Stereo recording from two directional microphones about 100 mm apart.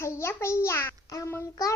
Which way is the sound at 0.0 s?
25° left (ahead or behind).